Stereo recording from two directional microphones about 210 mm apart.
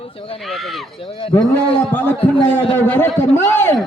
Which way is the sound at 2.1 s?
30° left (ahead or behind).